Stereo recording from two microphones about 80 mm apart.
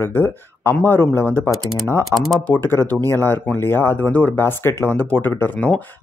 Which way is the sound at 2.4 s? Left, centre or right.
Left.